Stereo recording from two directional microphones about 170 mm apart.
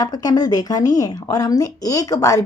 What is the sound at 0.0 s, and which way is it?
A woman's voice, 25° left (ahead or behind).